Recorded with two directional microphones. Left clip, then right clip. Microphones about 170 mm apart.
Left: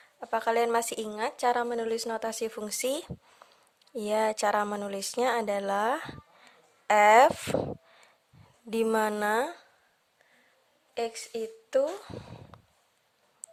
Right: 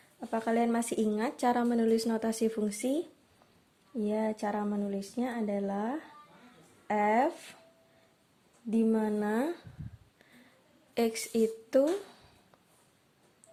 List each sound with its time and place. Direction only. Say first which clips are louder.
0.2 s speech: left 4 dB; 25° left (ahead or behind)
3.9 s speech: left 5 dB; 45° left (ahead or behind)
8.7 s speech: left 4 dB; 50° left (ahead or behind)
10.9 s a woman's voice: right 3 dB; 5° left (ahead or behind)